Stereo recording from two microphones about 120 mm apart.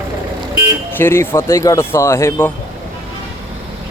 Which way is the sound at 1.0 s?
20° left (ahead or behind).